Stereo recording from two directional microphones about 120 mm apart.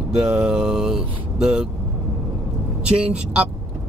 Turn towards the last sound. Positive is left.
turn(degrees=-10)  # may be behind; listen again after turning